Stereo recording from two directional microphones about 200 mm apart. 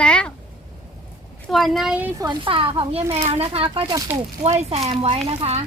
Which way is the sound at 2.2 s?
25° right (ahead or behind).